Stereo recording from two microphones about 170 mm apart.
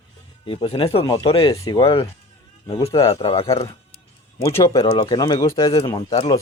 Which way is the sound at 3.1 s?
35° left (ahead or behind).